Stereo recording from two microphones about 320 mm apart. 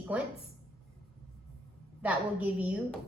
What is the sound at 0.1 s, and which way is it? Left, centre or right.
Speech, centre.